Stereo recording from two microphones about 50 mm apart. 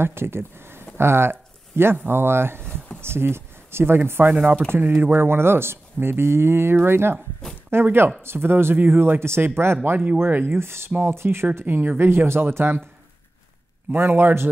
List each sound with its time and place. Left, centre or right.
0.0 s speech: right
0.9 s a sound: right
2.0 s speech: right
11.6 s speech: right
13.9 s speech: right